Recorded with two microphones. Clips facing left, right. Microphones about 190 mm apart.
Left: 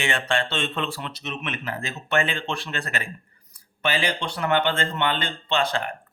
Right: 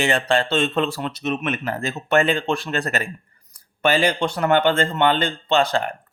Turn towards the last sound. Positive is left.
turn(degrees=-40)  # may be behind; listen again after turning